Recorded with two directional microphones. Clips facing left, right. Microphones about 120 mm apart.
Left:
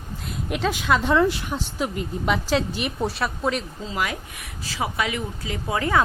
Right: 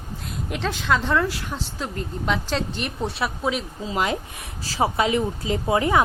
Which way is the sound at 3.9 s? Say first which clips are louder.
Right 4 dB; 25° right (ahead or behind).